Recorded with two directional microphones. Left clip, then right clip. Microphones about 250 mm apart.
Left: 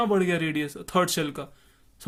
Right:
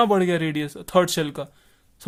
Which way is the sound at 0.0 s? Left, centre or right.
Right.